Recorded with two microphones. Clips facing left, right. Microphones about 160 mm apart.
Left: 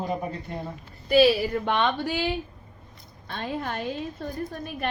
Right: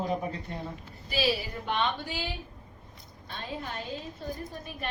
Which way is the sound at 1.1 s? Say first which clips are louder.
Left 11 dB; 60° left (ahead or behind).